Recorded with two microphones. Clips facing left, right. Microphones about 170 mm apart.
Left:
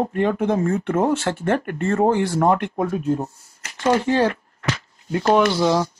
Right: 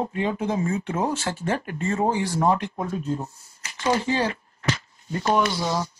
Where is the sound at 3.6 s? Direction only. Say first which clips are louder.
Left 4 dB; 55° left (ahead or behind).